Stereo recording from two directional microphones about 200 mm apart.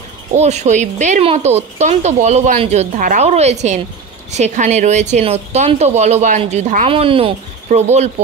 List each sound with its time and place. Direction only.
0.3 s speech: 35° right (ahead or behind)